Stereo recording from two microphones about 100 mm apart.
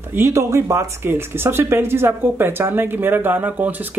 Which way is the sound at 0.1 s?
30° right (ahead or behind).